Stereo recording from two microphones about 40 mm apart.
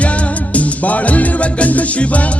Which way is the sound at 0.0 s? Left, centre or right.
Left.